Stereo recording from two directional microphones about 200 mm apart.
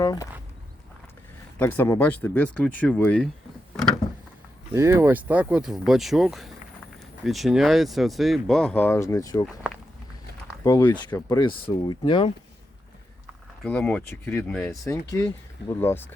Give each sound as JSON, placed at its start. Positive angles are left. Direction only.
{"t": 0.0, "sound": "speech", "side_deg": 20}
{"t": 1.5, "sound": "speech", "side_deg": 10}
{"t": 4.7, "sound": "speech", "side_deg": -10}
{"t": 10.6, "sound": "speech", "side_deg": 15}
{"t": 13.7, "sound": "speech", "side_deg": 5}
{"t": 14.8, "sound": "speech", "side_deg": 15}